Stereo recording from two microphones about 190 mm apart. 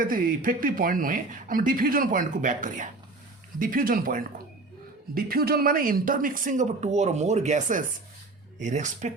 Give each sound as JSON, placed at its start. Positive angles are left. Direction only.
{"t": 0.0, "sound": "speech", "side_deg": -45}